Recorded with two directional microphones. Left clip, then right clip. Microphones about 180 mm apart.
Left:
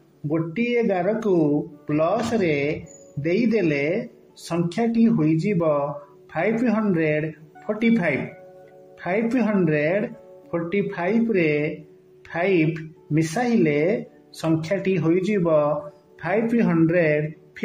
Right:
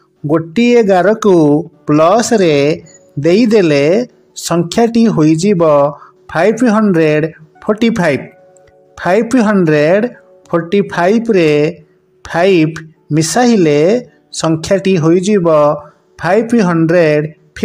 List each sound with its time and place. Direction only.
0.3 s speech: 40° right (ahead or behind)